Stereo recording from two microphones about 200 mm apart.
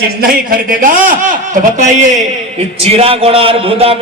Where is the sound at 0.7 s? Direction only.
40° right (ahead or behind).